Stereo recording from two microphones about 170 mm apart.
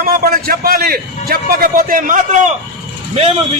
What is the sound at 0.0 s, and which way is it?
A man's voice, 55° right (ahead or behind).